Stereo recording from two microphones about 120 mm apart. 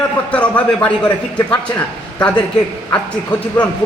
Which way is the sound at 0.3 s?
10° left (ahead or behind).